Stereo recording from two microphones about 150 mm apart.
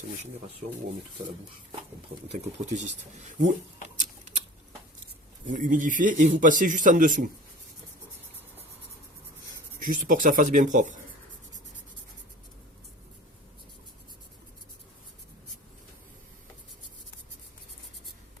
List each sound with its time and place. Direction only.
2.6 s speech: 50° right (ahead or behind)
3.8 s a sound: 50° right (ahead or behind)
5.5 s speech: 60° right (ahead or behind)
9.8 s speech: 60° right (ahead or behind)